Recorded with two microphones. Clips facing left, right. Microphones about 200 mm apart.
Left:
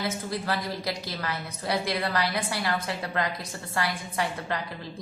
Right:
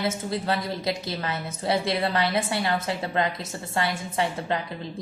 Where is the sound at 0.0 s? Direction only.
25° right (ahead or behind).